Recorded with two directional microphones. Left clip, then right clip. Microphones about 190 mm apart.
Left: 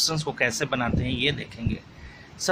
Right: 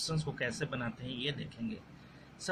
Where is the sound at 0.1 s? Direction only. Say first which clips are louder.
Left 12 dB; 30° left (ahead or behind).